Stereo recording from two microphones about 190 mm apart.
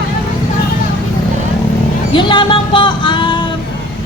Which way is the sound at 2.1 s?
25° left (ahead or behind).